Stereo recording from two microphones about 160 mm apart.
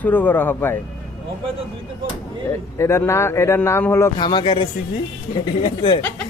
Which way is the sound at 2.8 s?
15° left (ahead or behind).